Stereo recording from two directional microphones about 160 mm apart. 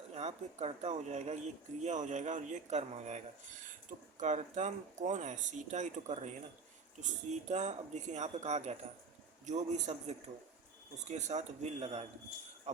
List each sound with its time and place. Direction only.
0.1 s speech: 40° right (ahead or behind)
12.7 s jingle bell: 45° right (ahead or behind)